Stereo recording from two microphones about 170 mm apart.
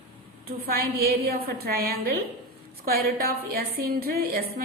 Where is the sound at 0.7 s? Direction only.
65° right (ahead or behind).